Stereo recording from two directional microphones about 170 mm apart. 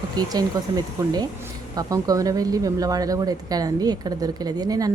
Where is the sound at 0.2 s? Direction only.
25° right (ahead or behind).